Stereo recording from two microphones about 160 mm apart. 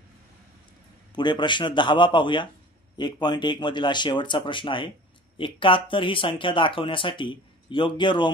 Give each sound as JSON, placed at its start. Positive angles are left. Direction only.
{"t": 1.1, "sound": "speech", "side_deg": 30}